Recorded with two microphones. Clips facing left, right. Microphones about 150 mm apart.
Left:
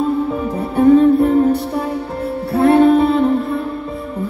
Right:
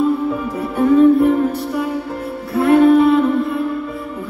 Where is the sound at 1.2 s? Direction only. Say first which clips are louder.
Left 2 dB; 30° left (ahead or behind).